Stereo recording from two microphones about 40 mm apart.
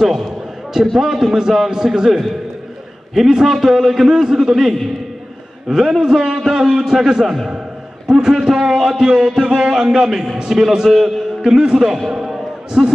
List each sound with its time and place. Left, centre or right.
0.0 s a man's voice: centre
10.3 s a man's voice: centre
10.9 s a man's voice: centre
11.4 s a man's voice: centre
12.1 s basketball bounce: centre